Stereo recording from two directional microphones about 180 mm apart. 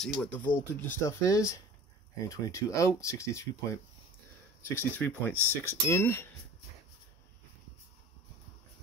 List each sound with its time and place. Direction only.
0.0 s speech: 5° left (ahead or behind)
4.6 s speech: 10° left (ahead or behind)